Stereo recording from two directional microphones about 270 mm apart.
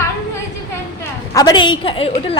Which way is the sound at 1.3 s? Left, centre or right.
Centre.